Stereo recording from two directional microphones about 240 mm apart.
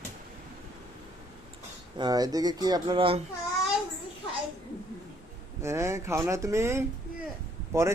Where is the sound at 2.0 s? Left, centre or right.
Centre.